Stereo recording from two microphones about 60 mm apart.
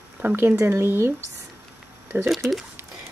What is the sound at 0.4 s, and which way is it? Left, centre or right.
Speech, right.